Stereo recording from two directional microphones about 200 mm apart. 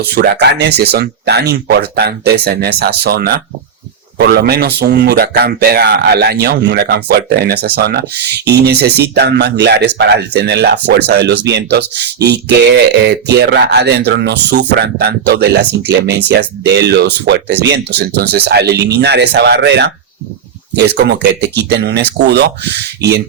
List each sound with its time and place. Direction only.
0.2 s speech: 55° right (ahead or behind)